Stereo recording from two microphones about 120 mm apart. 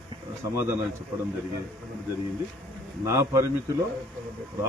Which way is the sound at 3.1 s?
25° right (ahead or behind).